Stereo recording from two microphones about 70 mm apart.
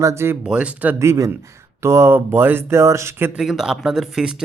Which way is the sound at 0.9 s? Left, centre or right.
Right.